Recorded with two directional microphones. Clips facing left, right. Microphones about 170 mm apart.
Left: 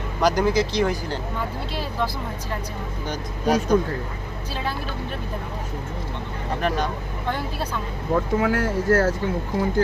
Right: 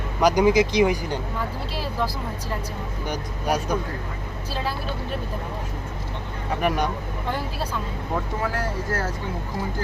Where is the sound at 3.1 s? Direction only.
10° right (ahead or behind).